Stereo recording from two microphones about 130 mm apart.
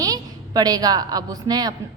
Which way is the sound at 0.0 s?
30° right (ahead or behind).